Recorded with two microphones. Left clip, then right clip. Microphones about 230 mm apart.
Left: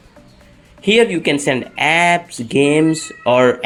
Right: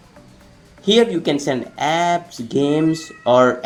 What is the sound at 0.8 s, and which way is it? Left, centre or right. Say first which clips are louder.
Speech: left 2 dB; left.